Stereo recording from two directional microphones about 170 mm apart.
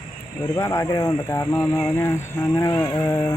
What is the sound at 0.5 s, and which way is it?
Speech, 20° left (ahead or behind).